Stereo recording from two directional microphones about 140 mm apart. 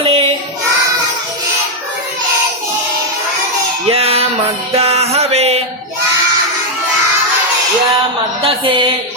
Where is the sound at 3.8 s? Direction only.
45° right (ahead or behind).